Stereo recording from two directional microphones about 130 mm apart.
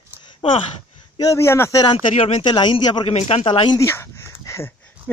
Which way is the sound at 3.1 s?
55° left (ahead or behind).